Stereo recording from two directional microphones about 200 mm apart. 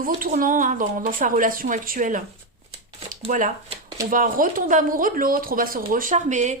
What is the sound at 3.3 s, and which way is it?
Speech, 40° right (ahead or behind).